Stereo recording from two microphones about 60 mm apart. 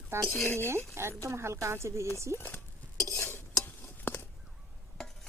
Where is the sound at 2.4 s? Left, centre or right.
Left.